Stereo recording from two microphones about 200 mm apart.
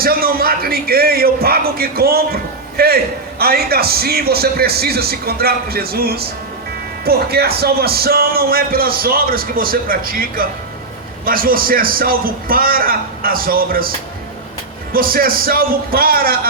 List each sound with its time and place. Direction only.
0.0 s a man's voice: 50° right (ahead or behind)
14.9 s a man's voice: 45° right (ahead or behind)